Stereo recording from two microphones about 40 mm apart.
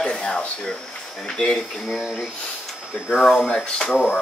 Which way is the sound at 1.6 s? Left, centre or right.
Centre.